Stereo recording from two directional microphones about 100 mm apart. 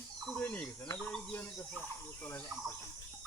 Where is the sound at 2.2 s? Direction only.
20° left (ahead or behind).